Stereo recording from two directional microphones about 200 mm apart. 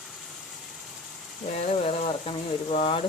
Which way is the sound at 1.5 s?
30° left (ahead or behind).